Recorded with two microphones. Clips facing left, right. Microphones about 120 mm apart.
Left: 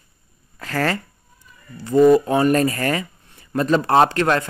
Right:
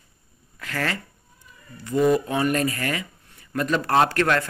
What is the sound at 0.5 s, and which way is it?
Speech, 40° left (ahead or behind).